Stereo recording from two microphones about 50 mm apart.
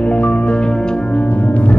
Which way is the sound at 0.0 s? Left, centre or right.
Left.